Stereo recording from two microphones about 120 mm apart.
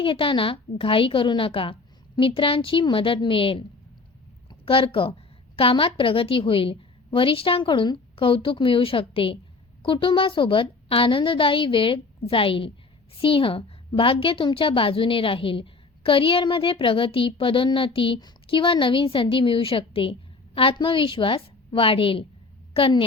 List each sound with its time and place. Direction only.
0.0 s a woman's voice: 45° left (ahead or behind)
4.6 s a woman's voice: 50° left (ahead or behind)